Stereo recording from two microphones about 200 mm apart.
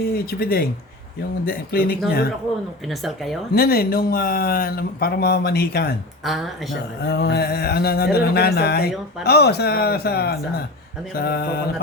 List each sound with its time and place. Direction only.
0.0 s speech: 50° left (ahead or behind)
3.5 s speech: 50° left (ahead or behind)
6.2 s speech: centre (ahead or behind)
7.0 s speech: 55° left (ahead or behind)